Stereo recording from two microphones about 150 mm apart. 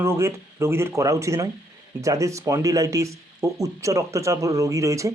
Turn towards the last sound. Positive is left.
turn(degrees=-20)  # may be behind; listen again after turning